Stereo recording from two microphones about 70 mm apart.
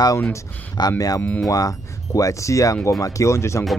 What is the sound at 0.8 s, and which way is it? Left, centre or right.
Speech, left.